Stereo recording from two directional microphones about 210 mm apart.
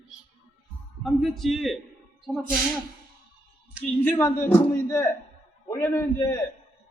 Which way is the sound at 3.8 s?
10° left (ahead or behind).